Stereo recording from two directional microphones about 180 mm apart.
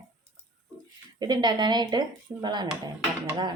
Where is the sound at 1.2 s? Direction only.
25° right (ahead or behind).